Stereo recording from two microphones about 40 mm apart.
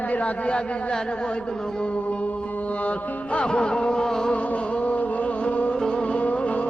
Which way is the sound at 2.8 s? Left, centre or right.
Left.